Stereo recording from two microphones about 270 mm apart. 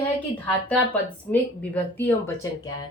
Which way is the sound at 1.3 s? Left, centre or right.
Centre.